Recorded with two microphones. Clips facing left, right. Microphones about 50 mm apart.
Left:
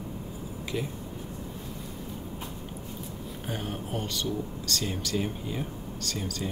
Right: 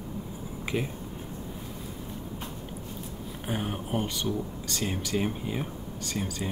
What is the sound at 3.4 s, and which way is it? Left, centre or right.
Speech, centre.